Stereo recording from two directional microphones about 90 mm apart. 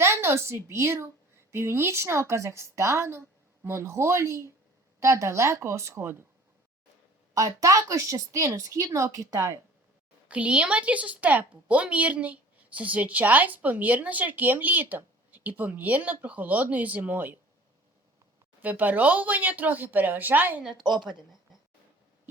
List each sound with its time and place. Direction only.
0.0 s speech: 30° right (ahead or behind)
7.3 s speech: 40° right (ahead or behind)
10.2 s a woman's voice: 15° right (ahead or behind)
18.6 s speech: 20° right (ahead or behind)